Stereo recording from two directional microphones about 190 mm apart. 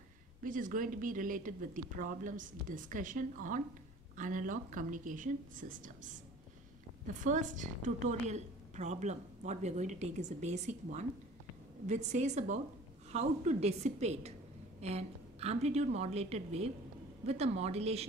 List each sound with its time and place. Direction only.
0.4 s speech: 45° right (ahead or behind)
7.2 s a woman's voice: 40° right (ahead or behind)